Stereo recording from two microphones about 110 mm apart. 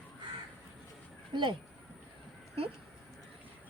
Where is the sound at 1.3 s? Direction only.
45° right (ahead or behind).